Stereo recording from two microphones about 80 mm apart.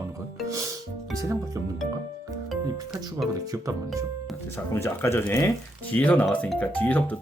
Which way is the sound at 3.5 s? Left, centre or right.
Right.